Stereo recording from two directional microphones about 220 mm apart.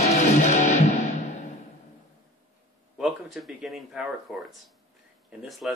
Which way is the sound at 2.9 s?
Centre (ahead or behind).